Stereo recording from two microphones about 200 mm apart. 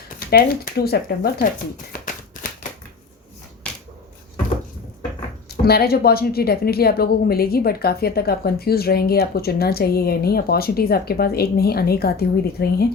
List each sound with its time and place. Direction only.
0.3 s speech: 50° left (ahead or behind)
1.9 s shuffling cards: 40° left (ahead or behind)
5.5 s speech: 50° left (ahead or behind)